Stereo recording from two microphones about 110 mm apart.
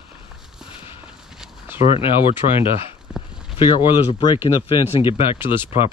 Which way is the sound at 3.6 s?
45° left (ahead or behind).